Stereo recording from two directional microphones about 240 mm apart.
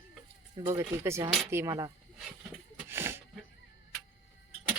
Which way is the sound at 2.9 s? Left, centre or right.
Centre.